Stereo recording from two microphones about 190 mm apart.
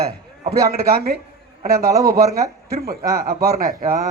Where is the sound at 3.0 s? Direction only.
15° right (ahead or behind).